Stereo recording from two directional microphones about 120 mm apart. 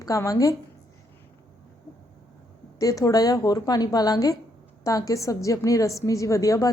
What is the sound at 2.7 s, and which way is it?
A woman's voice, 30° left (ahead or behind).